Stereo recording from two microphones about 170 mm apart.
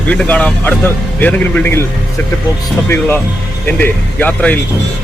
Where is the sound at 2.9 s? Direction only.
10° left (ahead or behind).